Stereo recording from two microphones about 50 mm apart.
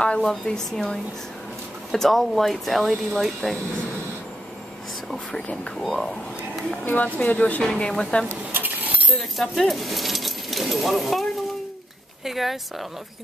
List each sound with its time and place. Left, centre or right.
0.0 s speech: centre
0.3 s speech: centre
5.8 s speech: centre
6.8 s speech: left
7.6 s speech: centre
8.5 s chink: right
9.4 s speech: centre
12.3 s speech: centre